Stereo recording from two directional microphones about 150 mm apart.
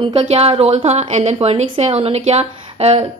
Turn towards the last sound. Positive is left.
turn(degrees=-40)  # may be behind; listen again after turning